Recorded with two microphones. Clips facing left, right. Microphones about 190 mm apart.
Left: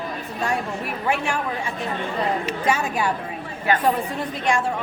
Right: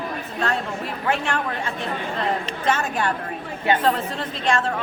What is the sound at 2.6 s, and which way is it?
Speech, 10° left (ahead or behind).